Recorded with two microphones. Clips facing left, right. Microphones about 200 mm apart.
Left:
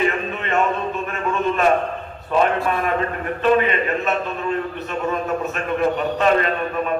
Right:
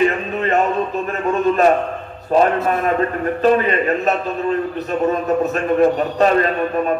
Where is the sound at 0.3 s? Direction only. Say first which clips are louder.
Right 3 dB; 35° right (ahead or behind).